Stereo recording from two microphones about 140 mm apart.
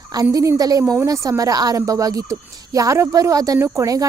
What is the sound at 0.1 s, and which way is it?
Speech, 25° right (ahead or behind).